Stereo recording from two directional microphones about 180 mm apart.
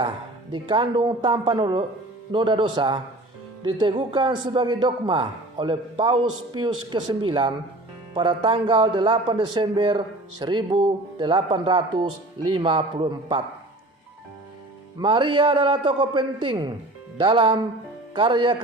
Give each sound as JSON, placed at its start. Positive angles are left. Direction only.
{"t": 0.5, "sound": "a man's voice", "side_deg": -25}
{"t": 14.9, "sound": "a man's voice", "side_deg": -25}